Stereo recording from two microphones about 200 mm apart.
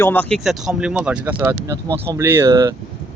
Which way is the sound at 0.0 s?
10° left (ahead or behind).